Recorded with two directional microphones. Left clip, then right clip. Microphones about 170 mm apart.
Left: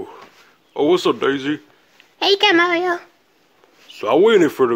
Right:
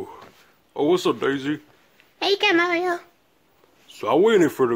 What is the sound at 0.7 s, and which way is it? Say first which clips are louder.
Speech: left 4 dB; 15° left (ahead or behind).